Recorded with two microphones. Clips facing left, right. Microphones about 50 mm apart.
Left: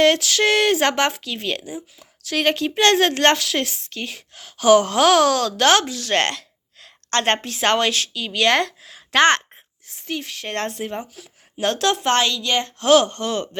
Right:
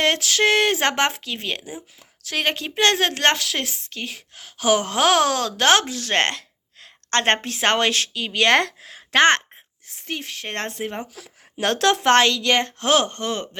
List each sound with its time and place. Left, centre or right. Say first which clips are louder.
0.0 s a woman's voice: left 3 dB; right
9.1 s a woman's voice: even; right
11.0 s speech: right 3 dB; right
12.8 s a woman's voice: left 4 dB; right